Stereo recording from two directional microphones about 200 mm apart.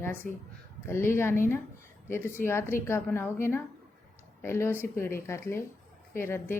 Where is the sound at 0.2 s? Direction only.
45° left (ahead or behind).